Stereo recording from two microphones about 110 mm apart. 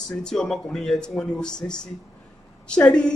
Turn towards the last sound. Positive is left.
turn(degrees=5)  # may be behind; listen again after turning